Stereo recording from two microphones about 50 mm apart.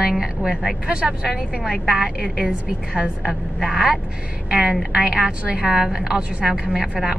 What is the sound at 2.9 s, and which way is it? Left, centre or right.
A woman's voice, centre.